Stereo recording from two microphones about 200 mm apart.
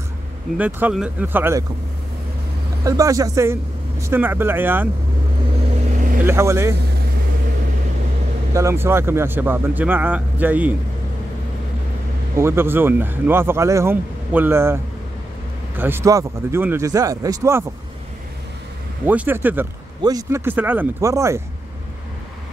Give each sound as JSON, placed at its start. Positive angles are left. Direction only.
{"t": 0.6, "sound": "speech", "side_deg": -10}
{"t": 2.8, "sound": "speech", "side_deg": -15}
{"t": 6.2, "sound": "speech", "side_deg": -15}
{"t": 8.5, "sound": "speech", "side_deg": -15}
{"t": 12.4, "sound": "speech", "side_deg": -10}
{"t": 19.0, "sound": "speech", "side_deg": -10}